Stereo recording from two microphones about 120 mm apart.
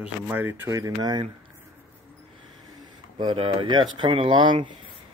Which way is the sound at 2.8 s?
40° right (ahead or behind).